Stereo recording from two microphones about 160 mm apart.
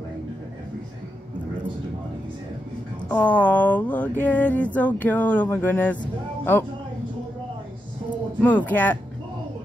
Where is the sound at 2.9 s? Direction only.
10° left (ahead or behind).